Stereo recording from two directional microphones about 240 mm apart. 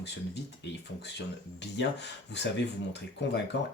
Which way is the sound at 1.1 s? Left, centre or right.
Left.